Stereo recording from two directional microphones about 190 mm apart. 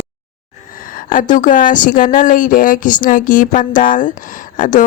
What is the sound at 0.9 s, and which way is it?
A woman's voice, 45° left (ahead or behind).